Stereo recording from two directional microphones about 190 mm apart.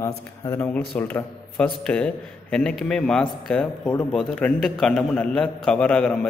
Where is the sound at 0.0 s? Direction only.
10° left (ahead or behind).